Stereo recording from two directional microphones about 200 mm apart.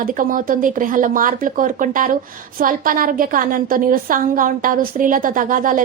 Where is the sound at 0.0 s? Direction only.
40° right (ahead or behind).